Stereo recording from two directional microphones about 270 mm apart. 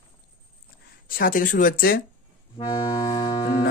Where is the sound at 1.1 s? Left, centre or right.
Left.